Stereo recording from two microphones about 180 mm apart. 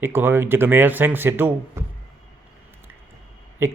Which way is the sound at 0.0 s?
10° right (ahead or behind).